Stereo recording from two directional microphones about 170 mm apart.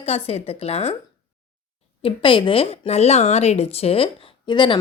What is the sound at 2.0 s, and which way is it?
Speech, 30° left (ahead or behind).